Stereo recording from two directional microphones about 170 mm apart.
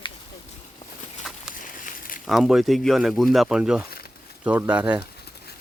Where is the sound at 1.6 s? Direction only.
50° left (ahead or behind).